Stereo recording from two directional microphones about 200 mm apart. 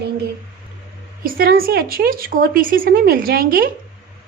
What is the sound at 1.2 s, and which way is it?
Speech, 50° right (ahead or behind).